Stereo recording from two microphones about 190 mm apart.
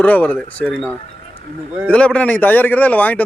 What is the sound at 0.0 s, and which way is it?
A man's voice, 10° left (ahead or behind).